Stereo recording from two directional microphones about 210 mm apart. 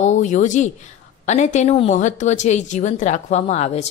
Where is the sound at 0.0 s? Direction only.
35° left (ahead or behind).